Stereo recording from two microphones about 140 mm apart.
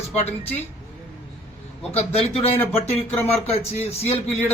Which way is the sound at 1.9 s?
45° left (ahead or behind).